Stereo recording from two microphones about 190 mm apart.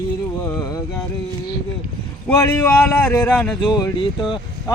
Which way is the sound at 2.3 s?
15° left (ahead or behind).